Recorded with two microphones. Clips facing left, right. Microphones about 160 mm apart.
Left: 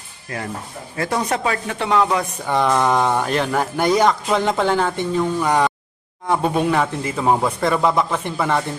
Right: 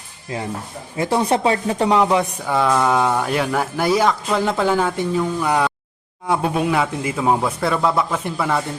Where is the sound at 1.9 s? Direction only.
20° right (ahead or behind).